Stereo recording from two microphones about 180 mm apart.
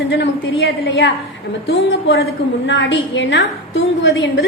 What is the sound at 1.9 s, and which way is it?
A woman's voice, 90° left.